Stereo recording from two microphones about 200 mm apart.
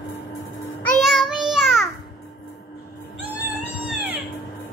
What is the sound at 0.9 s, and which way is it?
Child singing, centre (ahead or behind).